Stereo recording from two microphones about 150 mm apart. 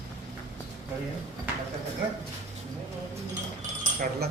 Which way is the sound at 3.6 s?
70° right (ahead or behind).